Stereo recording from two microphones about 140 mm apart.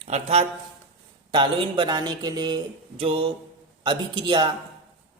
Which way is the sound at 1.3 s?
35° right (ahead or behind).